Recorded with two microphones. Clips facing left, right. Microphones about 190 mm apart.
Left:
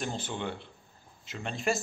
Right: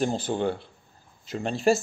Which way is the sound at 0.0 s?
35° right (ahead or behind).